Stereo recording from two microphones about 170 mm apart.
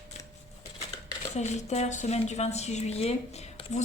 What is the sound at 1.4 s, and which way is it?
A woman's voice, 40° left (ahead or behind).